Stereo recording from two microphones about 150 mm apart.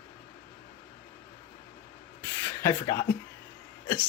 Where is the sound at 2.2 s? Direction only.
15° left (ahead or behind).